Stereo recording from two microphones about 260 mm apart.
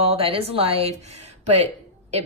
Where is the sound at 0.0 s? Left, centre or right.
Right.